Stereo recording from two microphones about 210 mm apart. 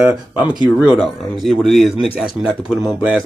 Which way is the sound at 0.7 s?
Centre (ahead or behind).